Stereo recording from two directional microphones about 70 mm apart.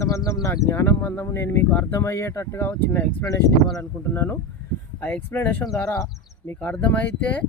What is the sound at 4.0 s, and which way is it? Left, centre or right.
Speech, left.